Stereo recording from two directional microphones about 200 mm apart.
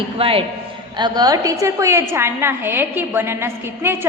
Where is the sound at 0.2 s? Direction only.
25° right (ahead or behind).